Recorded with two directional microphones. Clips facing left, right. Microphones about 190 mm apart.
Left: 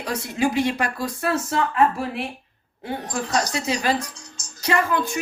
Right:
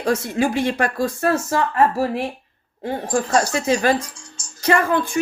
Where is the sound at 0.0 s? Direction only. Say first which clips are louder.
Right 4 dB; 50° right (ahead or behind).